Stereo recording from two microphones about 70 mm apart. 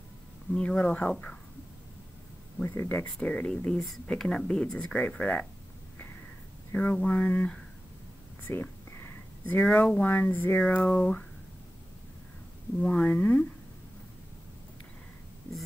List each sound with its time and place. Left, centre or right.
0.5 s speech: centre
2.6 s speech: left
3.3 s speech: centre
3.8 s speech: centre; by 5.5 s left
6.7 s speech: left
8.5 s a sound: left
10.0 s speech: left
12.8 s speech: centre